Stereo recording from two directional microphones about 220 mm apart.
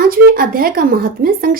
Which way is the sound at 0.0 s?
40° right (ahead or behind).